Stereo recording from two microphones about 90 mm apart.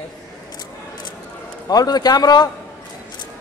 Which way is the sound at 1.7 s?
45° left (ahead or behind).